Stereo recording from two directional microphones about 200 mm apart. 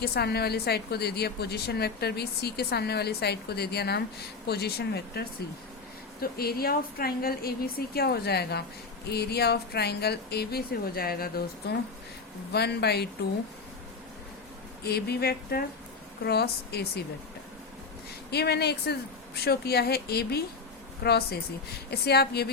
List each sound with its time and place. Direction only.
0.0 s a woman's voice: 55° left (ahead or behind)
14.8 s a woman's voice: 55° left (ahead or behind)
18.3 s a woman's voice: 55° left (ahead or behind)